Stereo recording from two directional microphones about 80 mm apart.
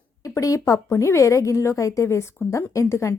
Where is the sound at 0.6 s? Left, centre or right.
Left.